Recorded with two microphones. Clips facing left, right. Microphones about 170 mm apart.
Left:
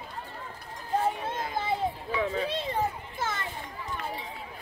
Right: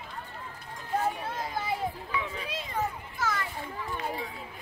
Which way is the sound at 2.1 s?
35° left (ahead or behind).